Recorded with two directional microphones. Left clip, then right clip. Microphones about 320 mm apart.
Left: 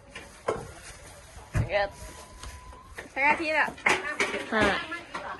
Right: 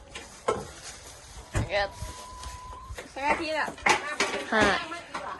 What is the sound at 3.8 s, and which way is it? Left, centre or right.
Music, right.